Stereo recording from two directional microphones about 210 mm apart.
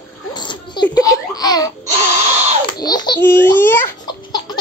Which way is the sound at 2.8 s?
20° left (ahead or behind).